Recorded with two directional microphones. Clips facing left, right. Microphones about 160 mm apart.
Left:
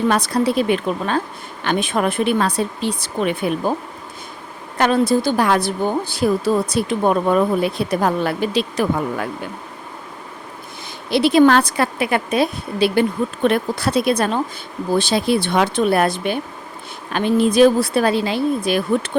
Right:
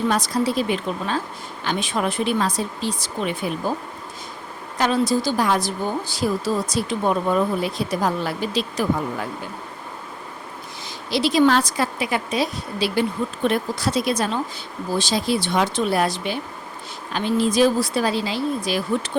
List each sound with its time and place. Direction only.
0.1 s a woman's voice: 65° left (ahead or behind)
4.8 s a woman's voice: 55° left (ahead or behind)
11.1 s a woman's voice: 55° left (ahead or behind)